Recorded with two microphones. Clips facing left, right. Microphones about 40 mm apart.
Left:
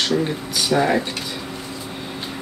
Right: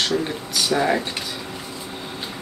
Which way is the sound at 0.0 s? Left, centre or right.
Centre.